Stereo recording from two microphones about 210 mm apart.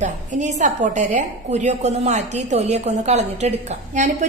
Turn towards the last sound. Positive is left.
turn(degrees=-35)  # may be behind; listen again after turning